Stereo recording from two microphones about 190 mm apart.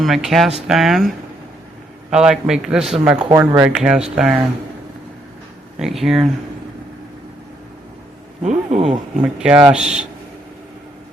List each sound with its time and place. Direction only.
0.0 s speech: centre (ahead or behind)
5.8 s speech: centre (ahead or behind)
8.4 s speech: 35° right (ahead or behind)
8.9 s speech: 5° right (ahead or behind)